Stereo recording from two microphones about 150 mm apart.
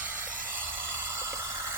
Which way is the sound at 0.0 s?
10° right (ahead or behind).